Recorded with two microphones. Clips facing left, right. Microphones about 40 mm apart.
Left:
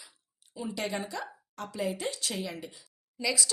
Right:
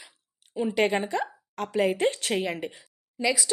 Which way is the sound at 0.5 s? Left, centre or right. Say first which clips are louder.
Right 10 dB; right.